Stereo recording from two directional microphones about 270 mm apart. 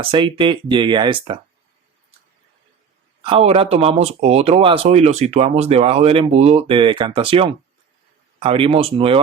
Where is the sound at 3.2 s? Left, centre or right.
Right.